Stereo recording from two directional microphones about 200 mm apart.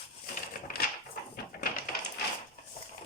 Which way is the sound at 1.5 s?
45° left (ahead or behind).